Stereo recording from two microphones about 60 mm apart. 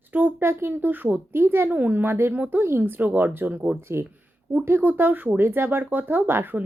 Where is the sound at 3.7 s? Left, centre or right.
Right.